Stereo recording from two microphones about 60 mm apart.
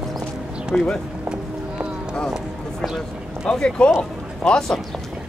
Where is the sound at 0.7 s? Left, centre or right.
Centre.